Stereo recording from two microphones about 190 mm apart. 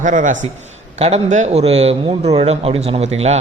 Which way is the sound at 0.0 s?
40° right (ahead or behind).